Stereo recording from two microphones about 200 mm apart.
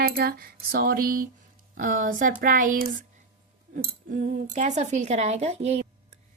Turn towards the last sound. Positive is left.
turn(degrees=-35)  # may be behind; listen again after turning